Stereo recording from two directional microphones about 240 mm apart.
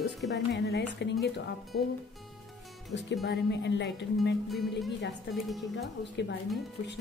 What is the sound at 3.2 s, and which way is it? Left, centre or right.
Speech, left.